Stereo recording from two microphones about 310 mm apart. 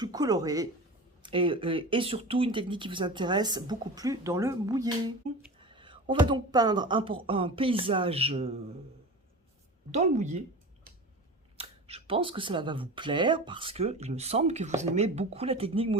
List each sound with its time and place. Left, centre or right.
0.0 s speech: centre
9.9 s speech: right
11.5 s speech: centre